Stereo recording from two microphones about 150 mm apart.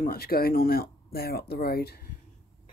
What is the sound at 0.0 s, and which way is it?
Speech, 90° left.